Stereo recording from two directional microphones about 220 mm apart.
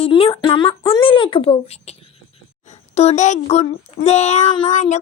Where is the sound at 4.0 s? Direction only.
30° left (ahead or behind).